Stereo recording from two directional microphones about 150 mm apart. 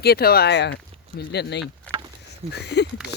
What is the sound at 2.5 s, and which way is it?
Speech, 90° left.